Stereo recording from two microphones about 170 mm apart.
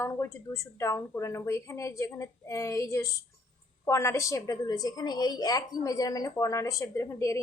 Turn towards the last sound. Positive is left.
turn(degrees=15)  # may be behind; listen again after turning